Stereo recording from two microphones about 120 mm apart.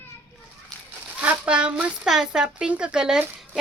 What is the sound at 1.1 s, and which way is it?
Speech, 10° right (ahead or behind).